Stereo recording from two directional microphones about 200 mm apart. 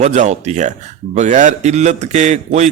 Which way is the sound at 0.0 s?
35° right (ahead or behind).